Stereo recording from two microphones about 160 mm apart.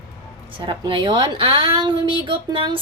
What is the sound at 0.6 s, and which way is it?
A woman's voice, 30° right (ahead or behind).